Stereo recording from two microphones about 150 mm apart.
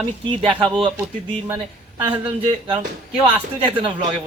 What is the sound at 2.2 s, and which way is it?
Speech, 30° right (ahead or behind).